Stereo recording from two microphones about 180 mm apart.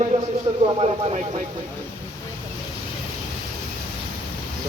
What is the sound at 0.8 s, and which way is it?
Speech, 30° right (ahead or behind).